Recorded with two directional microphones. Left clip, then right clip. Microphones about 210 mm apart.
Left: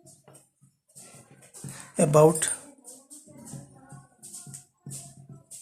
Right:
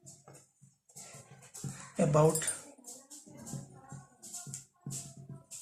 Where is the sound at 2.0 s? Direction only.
55° left (ahead or behind).